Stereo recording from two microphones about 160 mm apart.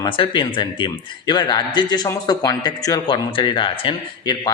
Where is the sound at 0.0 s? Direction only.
30° left (ahead or behind).